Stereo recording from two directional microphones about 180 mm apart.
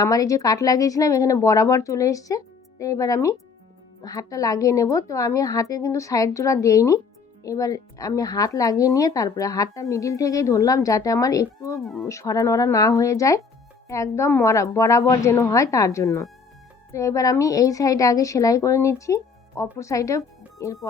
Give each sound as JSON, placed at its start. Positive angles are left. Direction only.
{"t": 0.0, "sound": "a woman's voice", "side_deg": 20}